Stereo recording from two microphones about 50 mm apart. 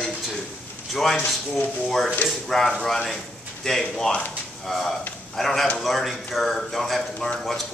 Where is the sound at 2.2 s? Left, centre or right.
Centre.